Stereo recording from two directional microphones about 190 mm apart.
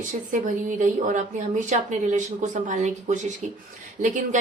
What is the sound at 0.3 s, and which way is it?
A woman's voice, 40° right (ahead or behind).